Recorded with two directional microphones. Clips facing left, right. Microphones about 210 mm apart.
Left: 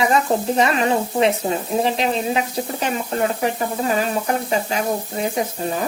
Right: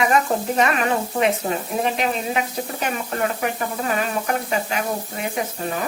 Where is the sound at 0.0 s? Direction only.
30° left (ahead or behind).